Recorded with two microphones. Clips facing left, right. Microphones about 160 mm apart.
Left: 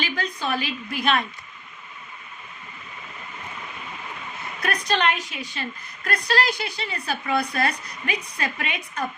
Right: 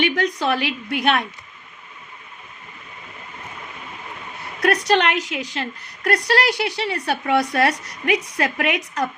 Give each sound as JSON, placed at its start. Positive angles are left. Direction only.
{"t": 0.0, "sound": "speech", "side_deg": -80}
{"t": 4.6, "sound": "a woman's voice", "side_deg": -80}
{"t": 6.1, "sound": "speech", "side_deg": -75}